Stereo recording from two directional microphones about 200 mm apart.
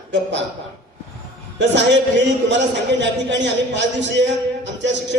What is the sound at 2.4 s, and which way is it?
A man's voice, 65° right (ahead or behind).